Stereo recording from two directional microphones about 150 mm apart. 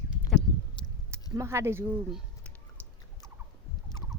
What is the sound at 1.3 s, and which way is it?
Speech, 20° right (ahead or behind).